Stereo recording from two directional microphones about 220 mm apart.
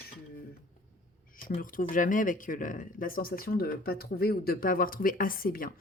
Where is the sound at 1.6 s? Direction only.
40° left (ahead or behind).